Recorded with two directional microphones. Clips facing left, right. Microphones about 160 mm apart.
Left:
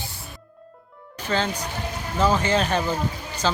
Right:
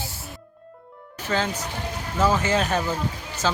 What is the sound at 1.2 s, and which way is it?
Speech, 5° right (ahead or behind).